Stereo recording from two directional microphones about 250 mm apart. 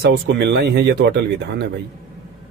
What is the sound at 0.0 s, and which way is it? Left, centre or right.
A man's voice, right.